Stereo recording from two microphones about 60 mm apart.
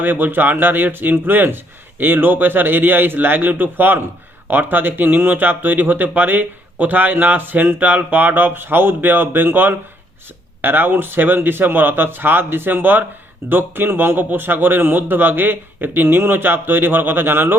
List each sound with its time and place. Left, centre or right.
0.0 s speech: right